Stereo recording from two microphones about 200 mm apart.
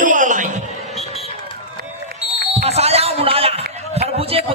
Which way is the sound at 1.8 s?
50° right (ahead or behind).